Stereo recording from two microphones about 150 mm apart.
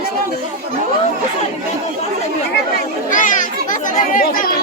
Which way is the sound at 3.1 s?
60° left (ahead or behind).